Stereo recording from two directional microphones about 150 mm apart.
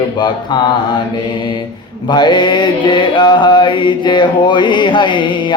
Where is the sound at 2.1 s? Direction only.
30° left (ahead or behind).